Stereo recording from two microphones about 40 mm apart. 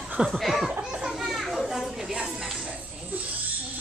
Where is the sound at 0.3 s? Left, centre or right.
Centre.